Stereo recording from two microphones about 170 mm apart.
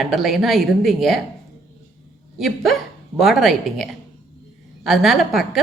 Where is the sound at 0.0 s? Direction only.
Centre (ahead or behind).